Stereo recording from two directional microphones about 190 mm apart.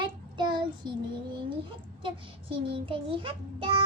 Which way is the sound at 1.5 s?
25° right (ahead or behind).